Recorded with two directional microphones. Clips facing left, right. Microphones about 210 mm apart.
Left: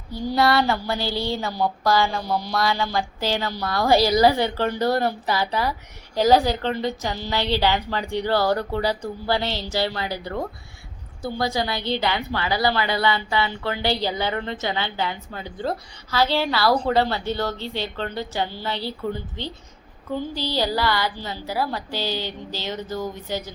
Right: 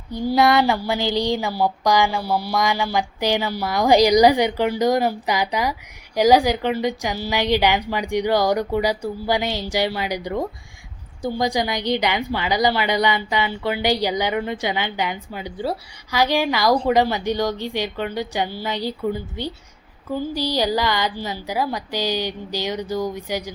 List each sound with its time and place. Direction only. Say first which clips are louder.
0.3 s a woman's voice: right 3 dB; 15° right (ahead or behind)